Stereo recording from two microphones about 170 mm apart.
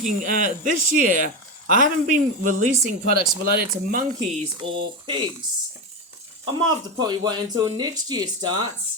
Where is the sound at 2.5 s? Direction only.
55° right (ahead or behind).